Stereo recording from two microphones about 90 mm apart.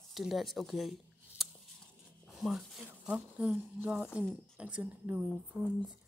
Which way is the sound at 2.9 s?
15° right (ahead or behind).